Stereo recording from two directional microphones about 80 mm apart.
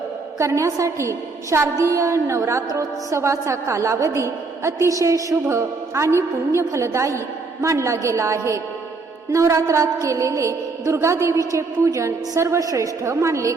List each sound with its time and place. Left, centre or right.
0.3 s a woman's voice: right